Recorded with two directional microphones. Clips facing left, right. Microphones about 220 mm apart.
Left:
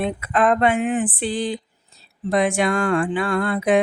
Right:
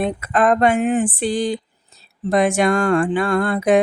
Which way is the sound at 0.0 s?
45° right (ahead or behind).